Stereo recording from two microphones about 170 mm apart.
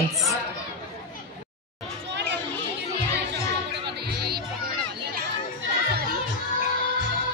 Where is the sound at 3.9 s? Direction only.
70° right (ahead or behind).